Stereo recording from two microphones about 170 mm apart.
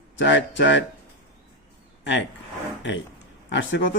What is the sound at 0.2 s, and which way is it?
Speech, 90° left.